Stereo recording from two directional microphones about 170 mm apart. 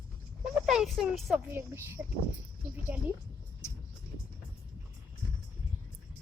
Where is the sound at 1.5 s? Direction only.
15° right (ahead or behind).